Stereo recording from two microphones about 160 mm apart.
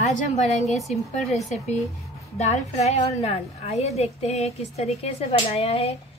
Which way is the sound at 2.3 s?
45° left (ahead or behind).